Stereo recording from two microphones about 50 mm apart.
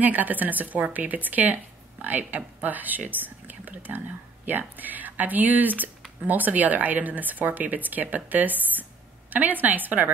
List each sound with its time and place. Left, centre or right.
0.0 s speech: right